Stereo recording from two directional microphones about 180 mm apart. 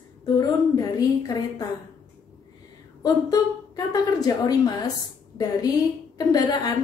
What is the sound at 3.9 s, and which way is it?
A woman's voice, 20° left (ahead or behind).